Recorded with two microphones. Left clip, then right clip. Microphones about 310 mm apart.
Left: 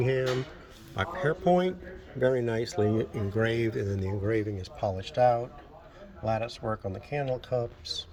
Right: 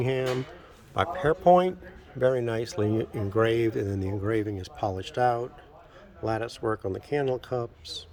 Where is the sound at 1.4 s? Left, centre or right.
Right.